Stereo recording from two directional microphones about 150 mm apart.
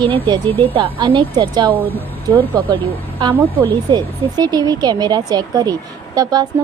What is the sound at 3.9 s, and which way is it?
A woman's voice, 25° right (ahead or behind).